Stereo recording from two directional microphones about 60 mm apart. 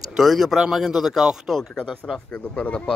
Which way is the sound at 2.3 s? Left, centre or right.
Left.